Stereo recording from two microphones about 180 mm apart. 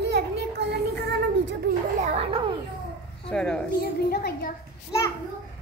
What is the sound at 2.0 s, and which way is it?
Speech, 35° right (ahead or behind).